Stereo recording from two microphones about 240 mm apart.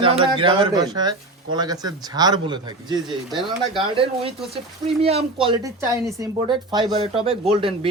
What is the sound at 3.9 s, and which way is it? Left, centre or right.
Speech, right.